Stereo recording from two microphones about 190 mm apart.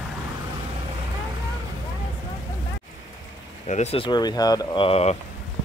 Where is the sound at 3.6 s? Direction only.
35° left (ahead or behind).